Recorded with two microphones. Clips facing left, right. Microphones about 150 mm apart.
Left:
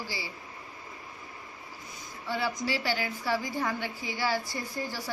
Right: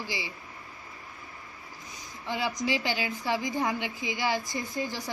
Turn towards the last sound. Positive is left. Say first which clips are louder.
# right 2 dB
turn(degrees=-20)  # may be behind; listen again after turning